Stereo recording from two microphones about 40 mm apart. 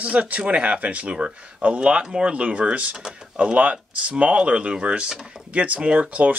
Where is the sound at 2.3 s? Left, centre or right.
Right.